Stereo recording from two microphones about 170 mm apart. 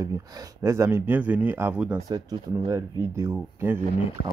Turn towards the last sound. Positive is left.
turn(degrees=-15)  # may be behind; listen again after turning